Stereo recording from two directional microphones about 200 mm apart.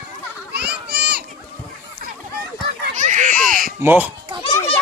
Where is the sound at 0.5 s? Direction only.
55° right (ahead or behind).